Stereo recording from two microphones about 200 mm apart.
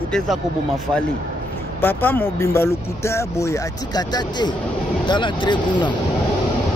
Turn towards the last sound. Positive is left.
turn(degrees=25)  # may be behind; listen again after turning